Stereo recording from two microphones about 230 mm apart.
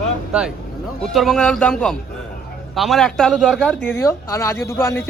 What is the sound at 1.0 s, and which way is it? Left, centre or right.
A man's voice, centre.